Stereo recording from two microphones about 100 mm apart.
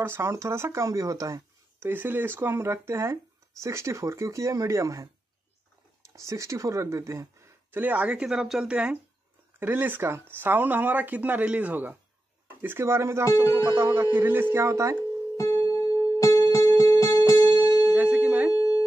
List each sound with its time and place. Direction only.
0.0 s speech: 25° right (ahead or behind)
6.1 s speech: 30° right (ahead or behind)
13.3 s speech: 30° left (ahead or behind)
13.7 s speech: 25° right (ahead or behind)
15.3 s music: 30° left (ahead or behind)
17.9 s a sound: 15° right (ahead or behind)
18.5 s a sound: 35° left (ahead or behind)